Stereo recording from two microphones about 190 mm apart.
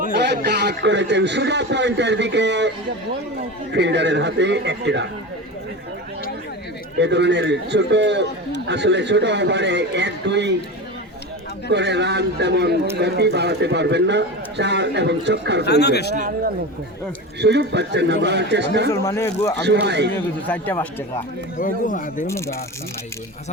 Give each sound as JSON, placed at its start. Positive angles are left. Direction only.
{"t": 0.1, "sound": "a man's voice", "side_deg": -65}
{"t": 7.0, "sound": "a man's voice", "side_deg": -65}
{"t": 11.7, "sound": "a man's voice", "side_deg": -65}
{"t": 15.6, "sound": "speech", "side_deg": 60}
{"t": 17.4, "sound": "a man's voice", "side_deg": -65}
{"t": 18.9, "sound": "speech", "side_deg": 15}
{"t": 19.6, "sound": "a man's voice", "side_deg": -65}
{"t": 20.5, "sound": "speech", "side_deg": 10}
{"t": 21.6, "sound": "a man's voice", "side_deg": 45}
{"t": 22.3, "sound": "speech", "side_deg": 15}